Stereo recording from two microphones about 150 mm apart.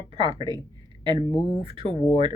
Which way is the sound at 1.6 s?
35° right (ahead or behind).